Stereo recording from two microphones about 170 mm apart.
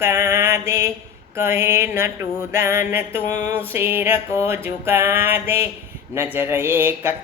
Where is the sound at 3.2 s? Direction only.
45° left (ahead or behind).